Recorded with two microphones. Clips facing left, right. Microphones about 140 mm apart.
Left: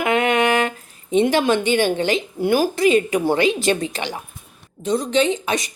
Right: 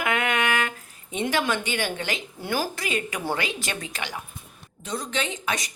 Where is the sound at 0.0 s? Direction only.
25° left (ahead or behind).